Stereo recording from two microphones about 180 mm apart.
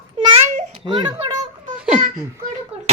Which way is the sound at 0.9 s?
20° right (ahead or behind).